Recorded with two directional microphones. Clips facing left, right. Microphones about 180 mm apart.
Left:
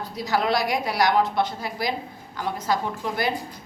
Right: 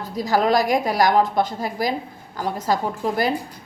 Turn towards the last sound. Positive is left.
turn(degrees=-40)  # may be behind; listen again after turning